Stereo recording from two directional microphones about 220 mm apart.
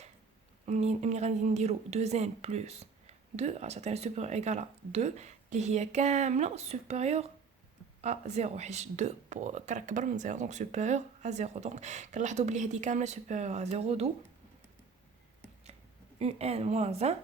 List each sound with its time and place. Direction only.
0.6 s a woman's voice: 30° right (ahead or behind)
16.1 s a woman's voice: 30° right (ahead or behind)